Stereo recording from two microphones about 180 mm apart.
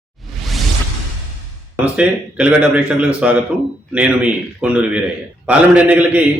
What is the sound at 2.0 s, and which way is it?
A man's voice, 5° right (ahead or behind).